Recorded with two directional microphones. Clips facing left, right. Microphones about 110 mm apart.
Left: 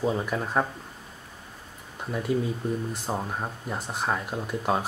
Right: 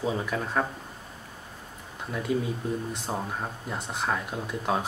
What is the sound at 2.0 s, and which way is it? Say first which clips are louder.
Speech: left 1 dB; centre (ahead or behind).